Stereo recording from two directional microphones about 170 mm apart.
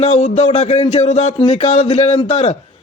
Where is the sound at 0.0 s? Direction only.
40° left (ahead or behind).